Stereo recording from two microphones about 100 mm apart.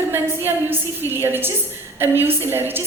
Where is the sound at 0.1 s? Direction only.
20° right (ahead or behind).